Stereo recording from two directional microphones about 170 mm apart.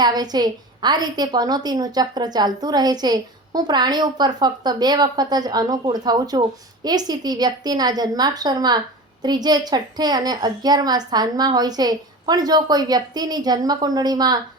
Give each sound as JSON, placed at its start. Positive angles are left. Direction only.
{"t": 0.0, "sound": "a woman's voice", "side_deg": -25}